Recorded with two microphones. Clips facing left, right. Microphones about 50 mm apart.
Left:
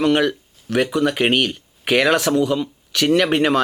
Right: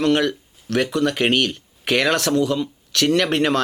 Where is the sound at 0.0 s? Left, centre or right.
Centre.